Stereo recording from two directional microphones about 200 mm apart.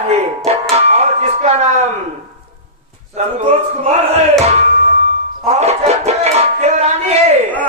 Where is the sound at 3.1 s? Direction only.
35° right (ahead or behind).